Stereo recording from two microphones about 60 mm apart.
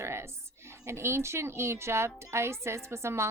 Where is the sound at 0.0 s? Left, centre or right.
Right.